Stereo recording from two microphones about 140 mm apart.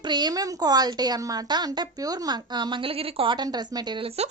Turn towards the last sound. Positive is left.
turn(degrees=-30)  # may be behind; listen again after turning